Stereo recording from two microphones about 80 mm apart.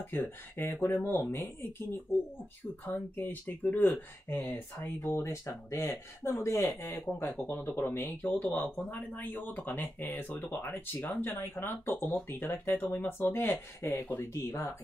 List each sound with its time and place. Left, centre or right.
0.0 s speech: left
5.1 s speech: left
7.4 s speech: left